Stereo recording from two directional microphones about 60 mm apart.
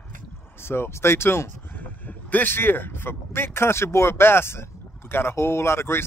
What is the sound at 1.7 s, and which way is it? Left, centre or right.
Speech, left.